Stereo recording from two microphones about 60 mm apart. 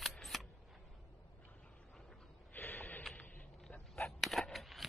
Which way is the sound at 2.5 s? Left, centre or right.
Left.